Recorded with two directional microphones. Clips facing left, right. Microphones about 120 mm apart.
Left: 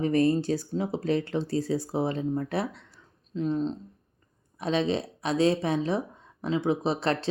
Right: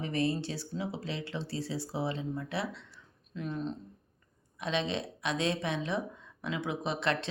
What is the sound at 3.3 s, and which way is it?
Speech, 30° left (ahead or behind).